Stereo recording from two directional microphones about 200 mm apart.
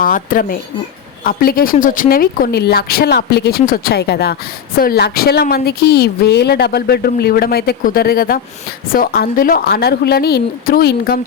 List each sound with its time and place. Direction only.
0.0 s a woman's voice: 45° left (ahead or behind)